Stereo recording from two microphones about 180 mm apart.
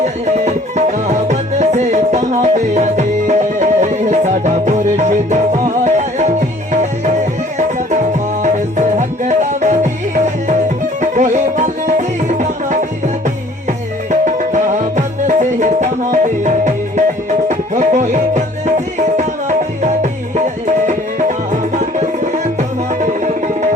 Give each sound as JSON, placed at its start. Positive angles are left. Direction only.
{"t": 0.0, "sound": "music", "side_deg": -40}
{"t": 8.4, "sound": "music", "side_deg": -40}
{"t": 14.1, "sound": "music", "side_deg": -45}